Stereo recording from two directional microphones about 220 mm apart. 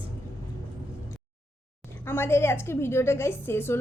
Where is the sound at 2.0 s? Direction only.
10° left (ahead or behind).